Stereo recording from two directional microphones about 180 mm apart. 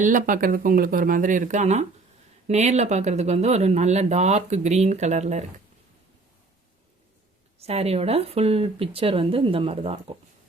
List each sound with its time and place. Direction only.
0.0 s speech: 45° right (ahead or behind)
7.6 s speech: 35° right (ahead or behind)